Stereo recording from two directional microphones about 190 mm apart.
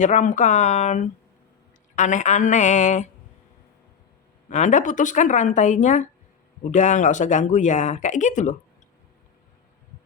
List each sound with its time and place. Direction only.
0.0 s speech: 40° left (ahead or behind)
4.4 s speech: 40° left (ahead or behind)